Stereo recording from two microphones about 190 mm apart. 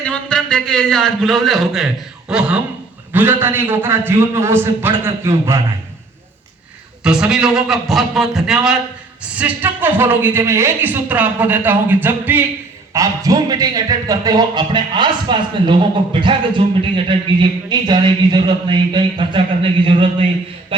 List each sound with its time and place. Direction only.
0.0 s a man's voice: 5° left (ahead or behind); by 5.5 s 15° right (ahead or behind)
7.0 s a man's voice: 5° right (ahead or behind); by 20.2 s 25° right (ahead or behind)